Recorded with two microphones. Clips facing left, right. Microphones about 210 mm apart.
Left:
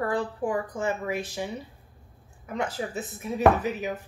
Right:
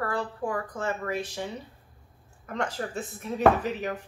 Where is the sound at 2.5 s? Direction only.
5° left (ahead or behind).